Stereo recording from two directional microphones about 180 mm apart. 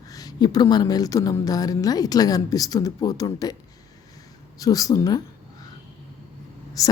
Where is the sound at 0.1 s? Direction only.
20° left (ahead or behind).